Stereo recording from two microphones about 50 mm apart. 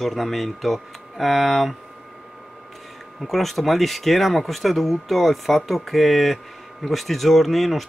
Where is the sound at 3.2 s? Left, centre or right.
Centre.